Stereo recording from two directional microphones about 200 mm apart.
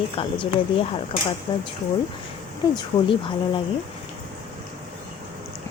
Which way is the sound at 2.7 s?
25° left (ahead or behind).